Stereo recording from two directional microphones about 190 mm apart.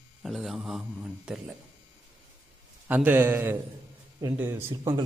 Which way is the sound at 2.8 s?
10° right (ahead or behind).